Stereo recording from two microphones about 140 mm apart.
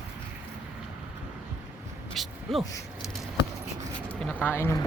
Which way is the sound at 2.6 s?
25° left (ahead or behind).